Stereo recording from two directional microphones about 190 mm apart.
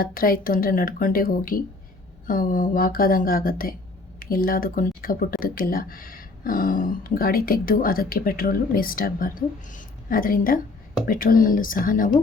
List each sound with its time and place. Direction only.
0.0 s speech: 50° left (ahead or behind)